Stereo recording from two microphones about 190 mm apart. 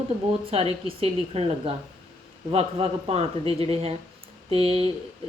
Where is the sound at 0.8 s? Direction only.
30° right (ahead or behind).